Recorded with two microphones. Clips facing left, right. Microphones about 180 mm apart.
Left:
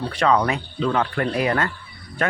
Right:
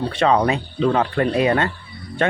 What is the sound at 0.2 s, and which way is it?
Speech, 25° right (ahead or behind).